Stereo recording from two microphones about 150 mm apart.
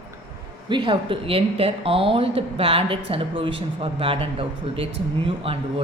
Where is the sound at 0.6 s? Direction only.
35° right (ahead or behind).